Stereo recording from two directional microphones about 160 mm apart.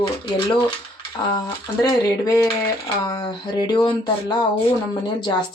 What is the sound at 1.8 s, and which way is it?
Speech, 20° left (ahead or behind).